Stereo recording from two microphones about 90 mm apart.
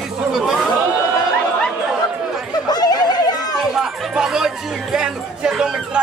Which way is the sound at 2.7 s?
50° left (ahead or behind).